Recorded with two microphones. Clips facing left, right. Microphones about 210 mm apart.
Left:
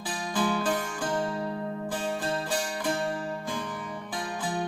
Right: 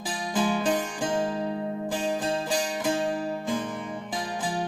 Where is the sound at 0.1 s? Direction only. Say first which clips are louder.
Right 2 dB; 25° right (ahead or behind).